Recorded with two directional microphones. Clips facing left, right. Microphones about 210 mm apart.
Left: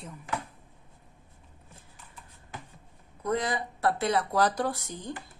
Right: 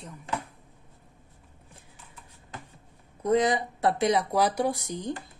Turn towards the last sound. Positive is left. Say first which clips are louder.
# right 5 dB
turn(degrees=-15)  # may be behind; listen again after turning